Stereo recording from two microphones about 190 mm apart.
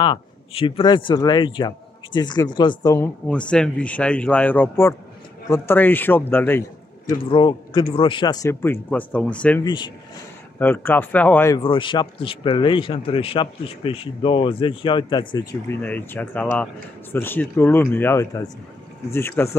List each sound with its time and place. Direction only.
0.0 s speech: 25° left (ahead or behind)
3.3 s speech: 5° left (ahead or behind)
7.1 s speech: 25° left (ahead or behind); by 9.6 s 5° left (ahead or behind)
10.6 s speech: 10° left (ahead or behind)
11.6 s speech: 25° left (ahead or behind)
15.8 s speech: 10° left (ahead or behind)